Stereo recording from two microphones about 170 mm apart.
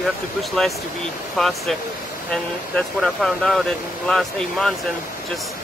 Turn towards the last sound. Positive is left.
turn(degrees=0)  # may be behind; listen again after turning